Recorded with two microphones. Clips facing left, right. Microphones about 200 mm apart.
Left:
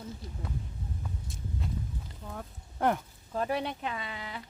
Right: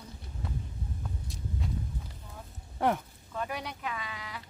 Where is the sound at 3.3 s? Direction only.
35° left (ahead or behind).